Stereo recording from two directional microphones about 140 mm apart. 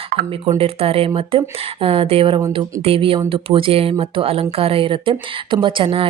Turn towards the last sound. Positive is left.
turn(degrees=-35)  # may be behind; listen again after turning